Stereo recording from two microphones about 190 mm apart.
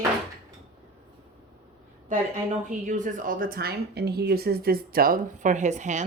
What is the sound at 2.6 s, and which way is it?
Speech, 40° right (ahead or behind).